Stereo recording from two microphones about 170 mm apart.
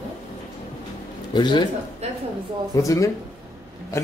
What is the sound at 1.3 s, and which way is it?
Speech, 25° left (ahead or behind).